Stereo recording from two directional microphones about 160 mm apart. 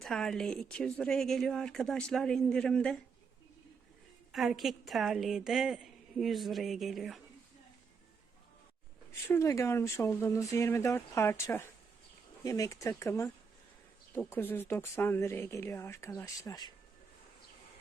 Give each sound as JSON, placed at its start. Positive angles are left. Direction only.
{"t": 0.0, "sound": "speech", "side_deg": 5}
{"t": 4.3, "sound": "speech", "side_deg": 0}
{"t": 9.2, "sound": "speech", "side_deg": 15}